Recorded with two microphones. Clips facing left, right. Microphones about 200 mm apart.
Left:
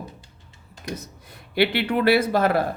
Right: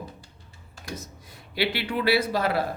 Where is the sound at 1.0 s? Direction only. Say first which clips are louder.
Left 1 dB; 55° left (ahead or behind).